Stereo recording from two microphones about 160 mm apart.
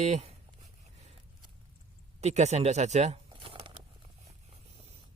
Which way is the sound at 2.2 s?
45° right (ahead or behind).